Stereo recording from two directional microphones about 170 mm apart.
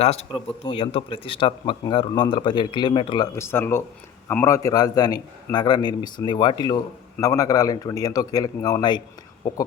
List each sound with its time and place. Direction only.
0.0 s a man's voice: 40° left (ahead or behind)
3.3 s a man's voice: 15° left (ahead or behind)